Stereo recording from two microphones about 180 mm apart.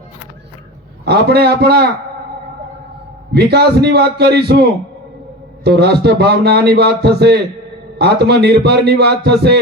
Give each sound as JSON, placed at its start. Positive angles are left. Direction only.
{"t": 1.0, "sound": "a man's voice", "side_deg": -65}
{"t": 3.3, "sound": "a man's voice", "side_deg": -65}
{"t": 5.6, "sound": "a man's voice", "side_deg": -65}